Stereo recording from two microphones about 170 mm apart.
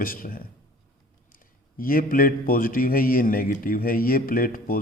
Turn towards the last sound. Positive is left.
turn(degrees=55)  # may be behind; listen again after turning